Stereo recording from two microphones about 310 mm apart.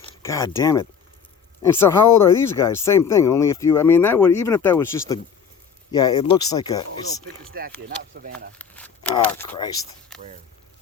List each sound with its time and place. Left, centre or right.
0.0 s speech: centre
7.5 s speech: right
8.5 s a sound: centre
9.1 s speech: centre